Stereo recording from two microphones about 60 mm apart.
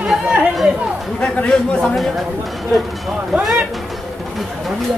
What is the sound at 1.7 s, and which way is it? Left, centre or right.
Speech, centre.